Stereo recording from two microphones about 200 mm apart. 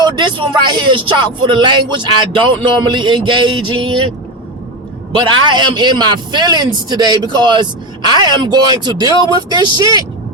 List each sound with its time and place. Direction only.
0.0 s a man's voice: 25° right (ahead or behind)
5.1 s a man's voice: 25° right (ahead or behind)